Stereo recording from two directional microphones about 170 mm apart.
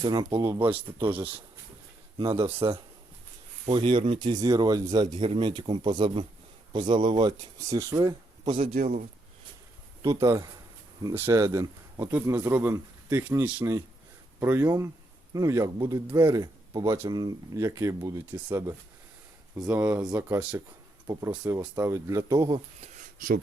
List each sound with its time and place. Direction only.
0.0 s speech: 25° right (ahead or behind)
8.8 s speech: 40° right (ahead or behind)
10.0 s speech: 20° right (ahead or behind)
22.8 s a sound: 50° right (ahead or behind)